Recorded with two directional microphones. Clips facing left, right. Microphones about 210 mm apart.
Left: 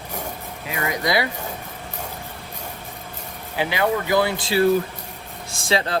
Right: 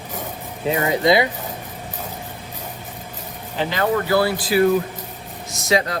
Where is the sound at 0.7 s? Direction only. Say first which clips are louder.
Right 7 dB; 30° right (ahead or behind).